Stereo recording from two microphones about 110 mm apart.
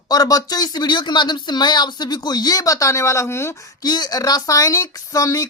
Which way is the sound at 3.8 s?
40° left (ahead or behind).